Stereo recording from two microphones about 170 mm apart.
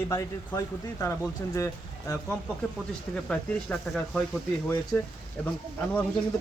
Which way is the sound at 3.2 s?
5° left (ahead or behind).